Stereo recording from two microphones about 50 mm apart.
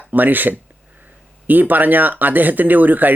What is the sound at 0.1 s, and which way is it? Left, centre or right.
Speech, right.